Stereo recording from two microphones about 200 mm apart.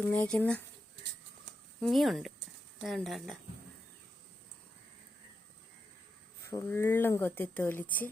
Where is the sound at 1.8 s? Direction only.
Centre (ahead or behind).